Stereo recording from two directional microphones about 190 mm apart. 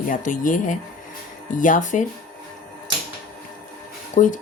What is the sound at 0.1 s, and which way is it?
Speech, 45° left (ahead or behind).